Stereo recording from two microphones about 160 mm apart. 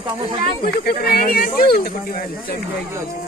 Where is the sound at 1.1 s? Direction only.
70° left (ahead or behind).